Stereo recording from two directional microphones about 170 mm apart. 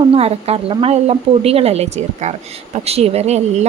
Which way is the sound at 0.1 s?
35° right (ahead or behind).